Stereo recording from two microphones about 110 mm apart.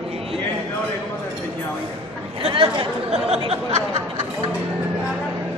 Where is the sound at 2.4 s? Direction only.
55° right (ahead or behind).